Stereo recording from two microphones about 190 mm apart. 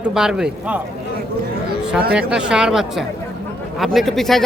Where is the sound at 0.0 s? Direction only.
5° right (ahead or behind).